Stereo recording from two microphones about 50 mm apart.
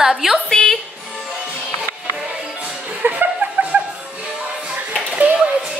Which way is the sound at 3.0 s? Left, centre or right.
Right.